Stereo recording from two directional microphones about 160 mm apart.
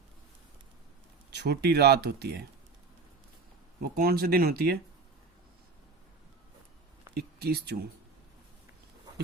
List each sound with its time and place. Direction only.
1.3 s speech: 90° right
3.8 s speech: 70° right (ahead or behind)
7.1 s speech: 80° right